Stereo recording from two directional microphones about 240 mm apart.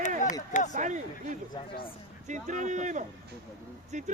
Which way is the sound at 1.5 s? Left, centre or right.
Left.